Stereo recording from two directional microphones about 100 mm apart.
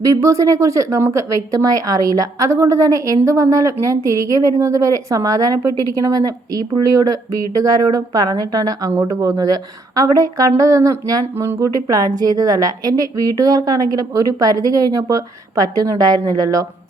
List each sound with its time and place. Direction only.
0.1 s speech: 30° right (ahead or behind)